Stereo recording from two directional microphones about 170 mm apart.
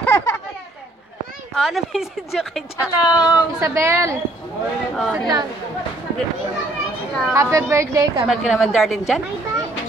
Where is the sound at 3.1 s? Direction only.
25° left (ahead or behind).